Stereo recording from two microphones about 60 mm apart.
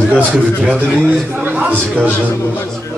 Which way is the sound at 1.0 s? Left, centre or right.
Right.